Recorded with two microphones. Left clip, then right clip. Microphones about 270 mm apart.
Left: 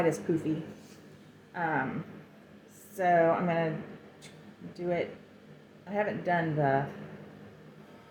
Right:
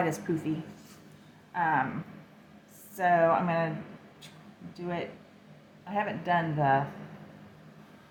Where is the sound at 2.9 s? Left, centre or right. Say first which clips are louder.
Right 1 dB; centre.